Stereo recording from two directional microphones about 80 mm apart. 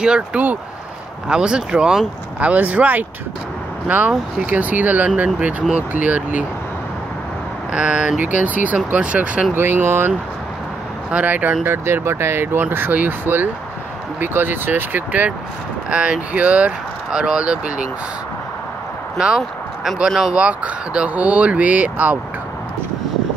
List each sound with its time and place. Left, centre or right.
0.0 s speech: centre
7.7 s speech: centre
9.5 s speech: right
11.6 s speech: right; by 17.8 s centre
19.8 s speech: centre
20.3 s speech: centre